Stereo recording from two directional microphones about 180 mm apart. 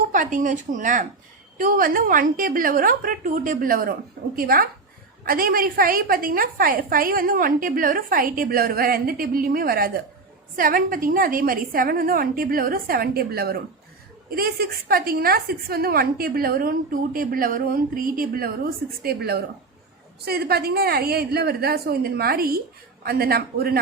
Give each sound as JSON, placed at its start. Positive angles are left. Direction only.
{"t": 0.1, "sound": "a woman's voice", "side_deg": -45}